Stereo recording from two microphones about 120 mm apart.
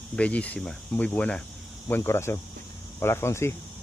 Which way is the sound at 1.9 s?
20° left (ahead or behind).